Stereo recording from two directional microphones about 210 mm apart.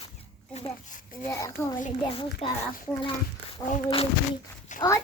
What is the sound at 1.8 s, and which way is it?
Speech, 35° left (ahead or behind).